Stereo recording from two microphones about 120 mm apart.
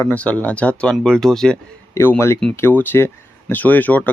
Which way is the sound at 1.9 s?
20° left (ahead or behind).